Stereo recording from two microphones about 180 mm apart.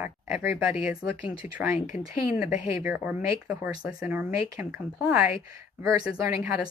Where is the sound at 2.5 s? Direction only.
45° left (ahead or behind).